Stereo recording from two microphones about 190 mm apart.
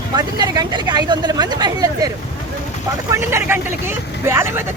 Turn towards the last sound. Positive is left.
turn(degrees=-10)  # may be behind; listen again after turning